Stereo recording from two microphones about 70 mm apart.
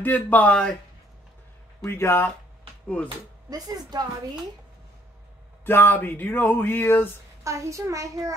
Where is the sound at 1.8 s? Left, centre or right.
Left.